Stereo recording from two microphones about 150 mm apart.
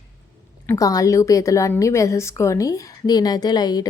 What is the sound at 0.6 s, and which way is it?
A woman's voice, 25° left (ahead or behind).